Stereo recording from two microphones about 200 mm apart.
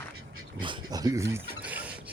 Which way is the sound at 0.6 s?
20° right (ahead or behind).